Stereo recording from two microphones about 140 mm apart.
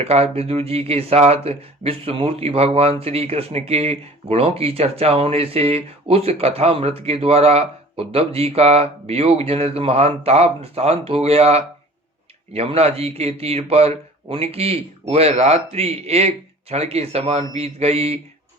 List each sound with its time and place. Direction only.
0.0 s speech: 45° right (ahead or behind)